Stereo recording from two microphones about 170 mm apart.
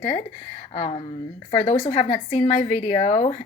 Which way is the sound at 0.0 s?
40° left (ahead or behind).